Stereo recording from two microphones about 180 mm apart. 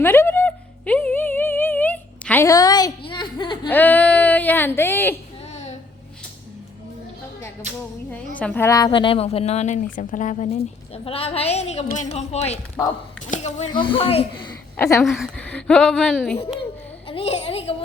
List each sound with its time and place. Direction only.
0.0 s a sound: 15° left (ahead or behind)
3.7 s a sound: 10° left (ahead or behind)
5.4 s a sound: 40° left (ahead or behind)
7.6 s speech: 40° right (ahead or behind)
8.4 s a woman's voice: 10° left (ahead or behind); by 13.7 s 40° left (ahead or behind)
13.7 s speech: 30° left (ahead or behind)
14.8 s a woman's voice: 15° left (ahead or behind)
15.0 s speech: centre (ahead or behind)
17.1 s a woman's voice: 30° left (ahead or behind)